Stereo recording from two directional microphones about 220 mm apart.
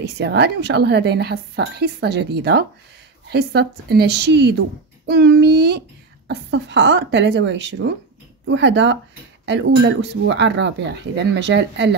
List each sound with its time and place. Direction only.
0.0 s a woman's voice: 50° right (ahead or behind)